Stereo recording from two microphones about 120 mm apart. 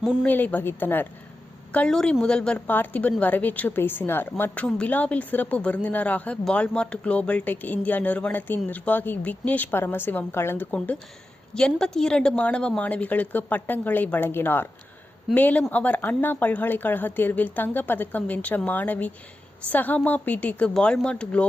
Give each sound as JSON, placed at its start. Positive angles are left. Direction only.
{"t": 0.0, "sound": "a woman's voice", "side_deg": -5}
{"t": 0.3, "sound": "a woman's voice", "side_deg": 15}